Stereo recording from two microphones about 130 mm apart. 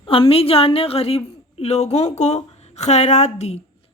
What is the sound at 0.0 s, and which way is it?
A woman's voice, 45° left (ahead or behind).